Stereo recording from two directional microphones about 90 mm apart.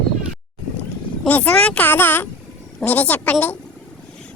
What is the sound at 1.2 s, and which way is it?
A child's voice, 15° left (ahead or behind).